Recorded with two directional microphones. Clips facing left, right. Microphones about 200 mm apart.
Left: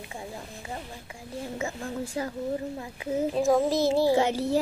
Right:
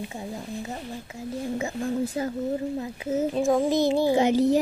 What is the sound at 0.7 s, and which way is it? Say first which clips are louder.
Speech: right 4 dB; 25° right (ahead or behind).